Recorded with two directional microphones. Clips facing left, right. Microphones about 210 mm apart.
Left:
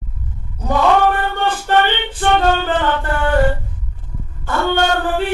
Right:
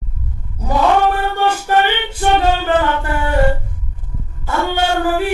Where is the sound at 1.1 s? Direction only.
10° right (ahead or behind).